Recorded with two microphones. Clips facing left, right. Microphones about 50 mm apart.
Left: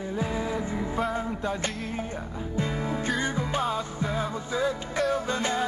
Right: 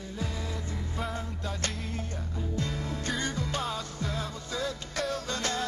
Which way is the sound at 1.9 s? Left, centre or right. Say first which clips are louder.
Left 4 dB; centre.